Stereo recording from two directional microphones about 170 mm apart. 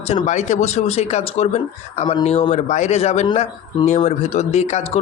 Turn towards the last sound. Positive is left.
turn(degrees=40)  # may be behind; listen again after turning